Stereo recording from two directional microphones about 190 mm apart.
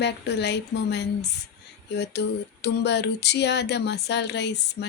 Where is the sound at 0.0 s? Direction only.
60° left (ahead or behind).